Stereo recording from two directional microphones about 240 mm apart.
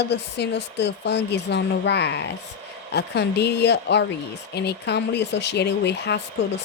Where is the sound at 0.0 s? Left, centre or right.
Left.